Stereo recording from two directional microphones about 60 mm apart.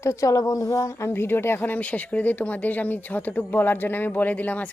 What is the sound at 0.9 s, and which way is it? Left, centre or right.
Speech, left.